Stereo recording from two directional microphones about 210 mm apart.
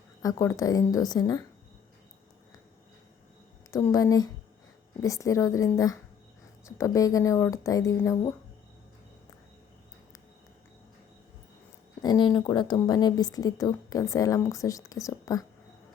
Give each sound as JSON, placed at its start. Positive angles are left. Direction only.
{"t": 0.2, "sound": "a woman's voice", "side_deg": 15}
{"t": 3.7, "sound": "a woman's voice", "side_deg": 15}
{"t": 12.0, "sound": "a woman's voice", "side_deg": 20}